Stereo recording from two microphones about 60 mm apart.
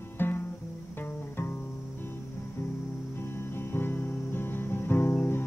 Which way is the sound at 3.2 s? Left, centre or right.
Left.